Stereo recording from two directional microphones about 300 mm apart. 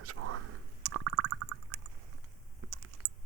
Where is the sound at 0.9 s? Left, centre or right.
Right.